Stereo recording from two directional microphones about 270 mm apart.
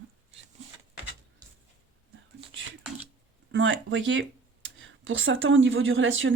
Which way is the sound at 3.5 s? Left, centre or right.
Right.